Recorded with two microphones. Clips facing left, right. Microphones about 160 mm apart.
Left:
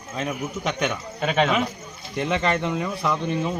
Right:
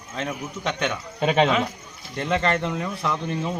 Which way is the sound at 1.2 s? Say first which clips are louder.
Right 2 dB; 30° right (ahead or behind).